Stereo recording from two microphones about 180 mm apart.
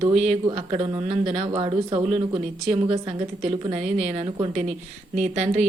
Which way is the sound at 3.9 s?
40° right (ahead or behind).